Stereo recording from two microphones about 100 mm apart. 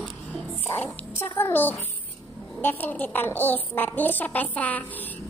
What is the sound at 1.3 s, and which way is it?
A child's voice, 20° left (ahead or behind).